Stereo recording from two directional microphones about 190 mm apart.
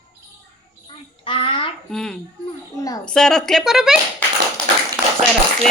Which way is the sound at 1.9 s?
5° left (ahead or behind).